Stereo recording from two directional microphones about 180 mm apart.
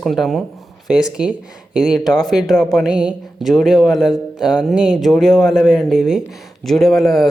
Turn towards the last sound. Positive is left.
turn(degrees=0)  # may be behind; listen again after turning